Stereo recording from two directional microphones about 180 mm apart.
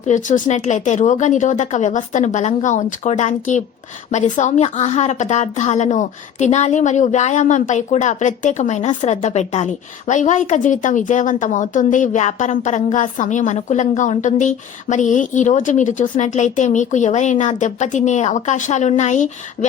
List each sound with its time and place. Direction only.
0.1 s a woman's voice: 45° left (ahead or behind)